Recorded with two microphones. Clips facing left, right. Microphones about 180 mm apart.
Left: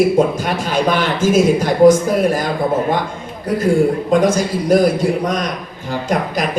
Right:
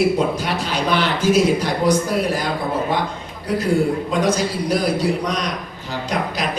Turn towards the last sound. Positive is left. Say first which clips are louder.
# left 5 dB
turn(degrees=50)  # may be behind; listen again after turning